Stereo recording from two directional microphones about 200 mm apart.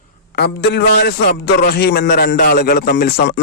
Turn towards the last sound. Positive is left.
turn(degrees=55)  # may be behind; listen again after turning